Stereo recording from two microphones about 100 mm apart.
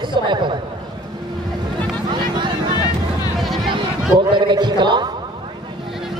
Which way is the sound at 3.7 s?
50° right (ahead or behind).